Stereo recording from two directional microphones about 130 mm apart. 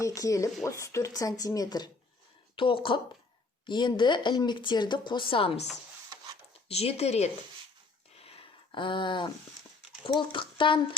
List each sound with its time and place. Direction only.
0.0 s speech: 25° left (ahead or behind)
2.6 s speech: 40° left (ahead or behind)
6.7 s speech: 50° left (ahead or behind)
8.2 s a sound: 45° left (ahead or behind)
10.1 s speech: 40° left (ahead or behind)